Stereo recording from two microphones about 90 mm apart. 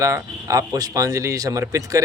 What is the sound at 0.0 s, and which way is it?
Speech, 35° right (ahead or behind).